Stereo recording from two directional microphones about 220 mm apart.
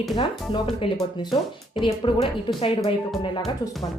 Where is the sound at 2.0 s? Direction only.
20° left (ahead or behind).